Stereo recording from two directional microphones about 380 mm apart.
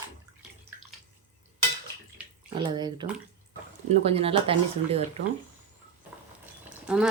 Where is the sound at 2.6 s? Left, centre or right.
Centre.